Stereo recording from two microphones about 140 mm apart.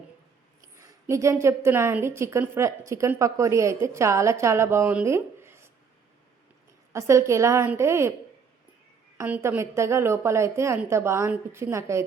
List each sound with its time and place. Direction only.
0.6 s a woman's voice: 20° right (ahead or behind)
5.0 s a sound: 20° right (ahead or behind)
6.9 s a woman's voice: 20° right (ahead or behind)
9.2 s a woman's voice: 15° right (ahead or behind)